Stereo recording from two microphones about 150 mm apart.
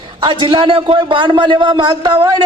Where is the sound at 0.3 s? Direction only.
35° right (ahead or behind).